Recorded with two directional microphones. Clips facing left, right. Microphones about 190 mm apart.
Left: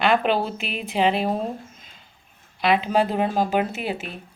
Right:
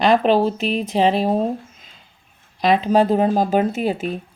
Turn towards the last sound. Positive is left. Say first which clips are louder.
# right 7 dB
turn(degrees=-40)  # may be behind; listen again after turning